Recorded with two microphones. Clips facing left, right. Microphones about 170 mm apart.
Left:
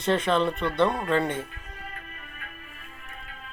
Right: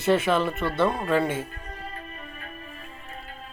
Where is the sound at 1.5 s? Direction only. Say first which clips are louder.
Right 4 dB; 40° right (ahead or behind).